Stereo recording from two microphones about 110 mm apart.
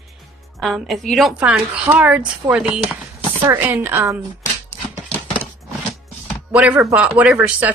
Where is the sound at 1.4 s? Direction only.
15° right (ahead or behind).